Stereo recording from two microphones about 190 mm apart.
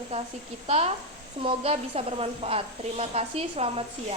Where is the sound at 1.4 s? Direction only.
30° right (ahead or behind).